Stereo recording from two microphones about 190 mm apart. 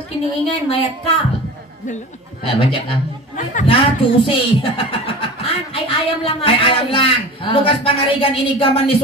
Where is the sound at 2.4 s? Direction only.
30° left (ahead or behind).